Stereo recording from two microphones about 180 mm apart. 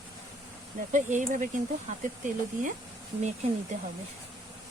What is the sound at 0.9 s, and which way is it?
Speech, 45° right (ahead or behind).